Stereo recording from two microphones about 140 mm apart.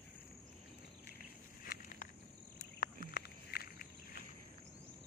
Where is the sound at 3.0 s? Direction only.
90° left.